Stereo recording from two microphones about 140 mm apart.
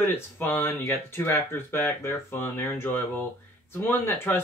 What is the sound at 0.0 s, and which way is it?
Speech, 15° left (ahead or behind).